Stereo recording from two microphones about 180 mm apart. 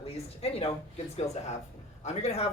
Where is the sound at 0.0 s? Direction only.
35° left (ahead or behind).